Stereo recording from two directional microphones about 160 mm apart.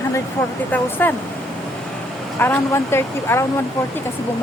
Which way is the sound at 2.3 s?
15° left (ahead or behind).